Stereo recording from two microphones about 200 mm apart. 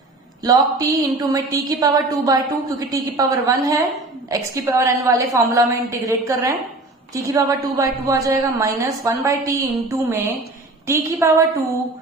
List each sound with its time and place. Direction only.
0.4 s a woman's voice: 15° right (ahead or behind)